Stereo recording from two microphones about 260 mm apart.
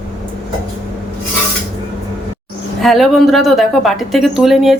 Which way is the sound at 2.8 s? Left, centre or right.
Centre.